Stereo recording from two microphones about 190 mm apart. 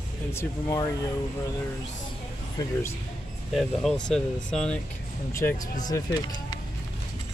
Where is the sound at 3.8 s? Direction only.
5° left (ahead or behind).